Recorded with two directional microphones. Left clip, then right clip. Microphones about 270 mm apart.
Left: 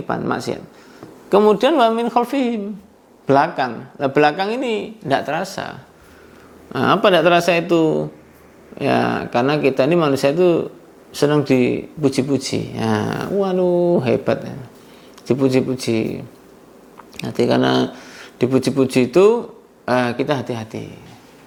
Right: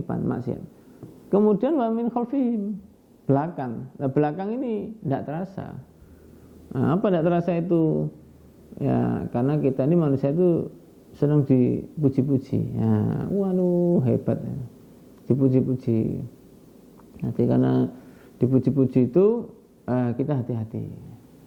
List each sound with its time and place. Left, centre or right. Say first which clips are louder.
0.1 s speech: left 8 dB; centre
13.7 s speech: left 6 dB; left
14.0 s speech: left 8 dB; centre
17.2 s speech: left 6 dB; centre